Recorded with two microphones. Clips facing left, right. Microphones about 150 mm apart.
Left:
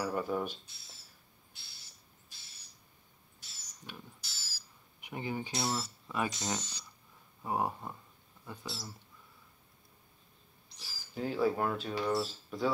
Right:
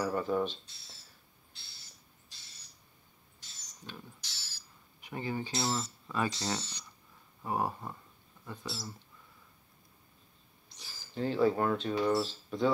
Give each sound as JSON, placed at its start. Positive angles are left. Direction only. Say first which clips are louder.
{"t": 0.0, "sound": "speech", "louder": "right 3 dB", "side_deg": 10}
{"t": 3.3, "sound": "owl", "louder": "right 1 dB", "side_deg": 5}
{"t": 5.0, "sound": "speech", "louder": "right 1 dB", "side_deg": 15}
{"t": 8.6, "sound": "speech", "louder": "right 3 dB", "side_deg": 0}
{"t": 10.8, "sound": "speech", "louder": "right 3 dB", "side_deg": 5}